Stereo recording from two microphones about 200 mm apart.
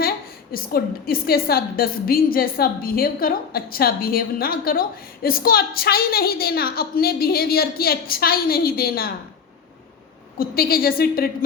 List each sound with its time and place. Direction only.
0.5 s a woman's voice: 45° left (ahead or behind)
10.3 s a woman's voice: 45° left (ahead or behind)